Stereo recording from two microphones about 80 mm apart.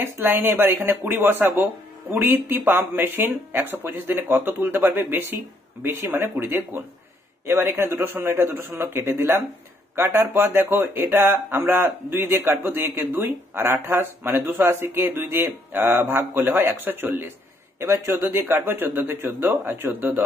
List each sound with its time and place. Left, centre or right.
0.0 s a man's voice: right
9.9 s speech: right